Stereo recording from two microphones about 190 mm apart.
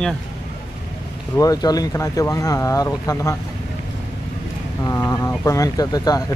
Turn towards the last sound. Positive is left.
turn(degrees=20)  # may be behind; listen again after turning